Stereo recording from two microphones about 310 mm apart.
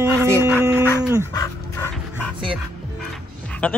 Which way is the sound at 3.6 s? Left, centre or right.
Centre.